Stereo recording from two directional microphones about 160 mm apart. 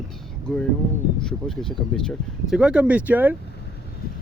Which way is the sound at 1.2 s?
5° left (ahead or behind).